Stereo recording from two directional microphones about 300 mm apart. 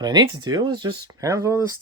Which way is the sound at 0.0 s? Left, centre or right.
Centre.